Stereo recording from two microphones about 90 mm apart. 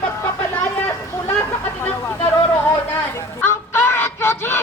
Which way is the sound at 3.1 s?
25° left (ahead or behind).